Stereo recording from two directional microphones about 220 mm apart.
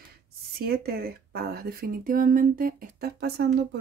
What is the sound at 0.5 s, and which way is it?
Speech, 45° right (ahead or behind).